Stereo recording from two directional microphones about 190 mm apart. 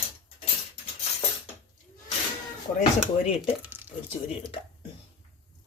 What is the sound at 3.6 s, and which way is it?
Speech, 10° right (ahead or behind).